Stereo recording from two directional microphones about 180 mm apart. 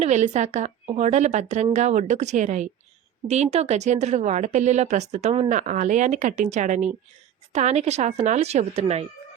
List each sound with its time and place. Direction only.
0.0 s a woman's voice: 40° right (ahead or behind)